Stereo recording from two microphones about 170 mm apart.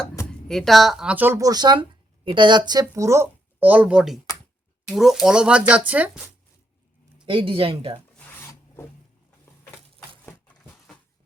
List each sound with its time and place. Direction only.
0.3 s speech: 5° left (ahead or behind)
7.3 s speech: 30° right (ahead or behind)
8.1 s filing: 15° left (ahead or behind)